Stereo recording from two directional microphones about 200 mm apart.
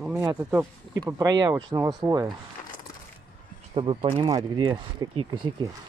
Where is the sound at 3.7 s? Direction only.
25° right (ahead or behind).